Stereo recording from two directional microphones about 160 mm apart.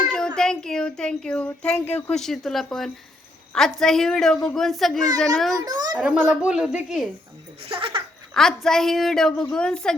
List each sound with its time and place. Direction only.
0.3 s a woman's voice: 5° left (ahead or behind)
5.6 s a child's voice: 25° right (ahead or behind)
6.0 s speech: 5° right (ahead or behind)
7.7 s speech: 35° right (ahead or behind)
8.3 s a woman's voice: 5° left (ahead or behind)